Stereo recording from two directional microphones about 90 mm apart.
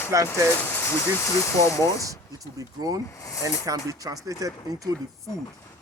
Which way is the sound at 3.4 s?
40° right (ahead or behind).